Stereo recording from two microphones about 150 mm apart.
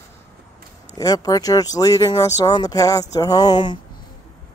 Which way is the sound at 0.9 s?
25° left (ahead or behind).